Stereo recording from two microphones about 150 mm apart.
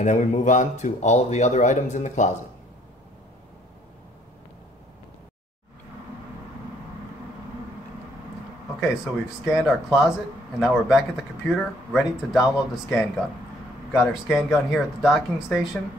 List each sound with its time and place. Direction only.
0.0 s a man's voice: 55° left (ahead or behind)
8.8 s speech: 5° right (ahead or behind)
14.3 s speech: centre (ahead or behind)